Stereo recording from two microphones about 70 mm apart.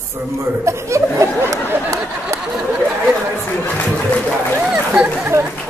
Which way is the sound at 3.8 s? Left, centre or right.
Left.